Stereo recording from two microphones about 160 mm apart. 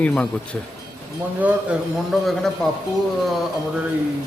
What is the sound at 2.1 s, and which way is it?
Speech, centre (ahead or behind).